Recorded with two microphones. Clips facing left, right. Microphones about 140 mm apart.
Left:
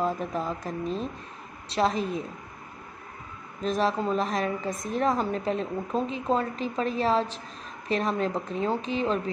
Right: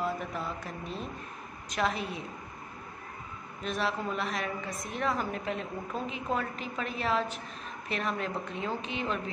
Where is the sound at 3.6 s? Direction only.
35° left (ahead or behind).